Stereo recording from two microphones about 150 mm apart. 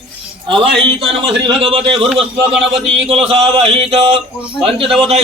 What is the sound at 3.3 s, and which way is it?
Speech, 40° right (ahead or behind).